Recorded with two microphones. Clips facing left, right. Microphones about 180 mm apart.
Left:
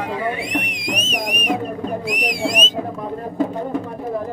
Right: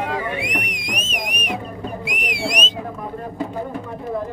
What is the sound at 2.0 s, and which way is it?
Whistle, 40° left (ahead or behind).